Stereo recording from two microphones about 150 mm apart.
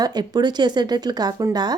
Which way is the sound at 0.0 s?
25° right (ahead or behind).